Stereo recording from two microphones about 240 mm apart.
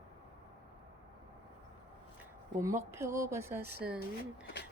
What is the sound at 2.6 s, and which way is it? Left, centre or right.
Speech, centre.